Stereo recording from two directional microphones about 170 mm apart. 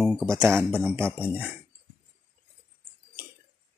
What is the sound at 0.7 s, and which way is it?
Speech, 15° right (ahead or behind).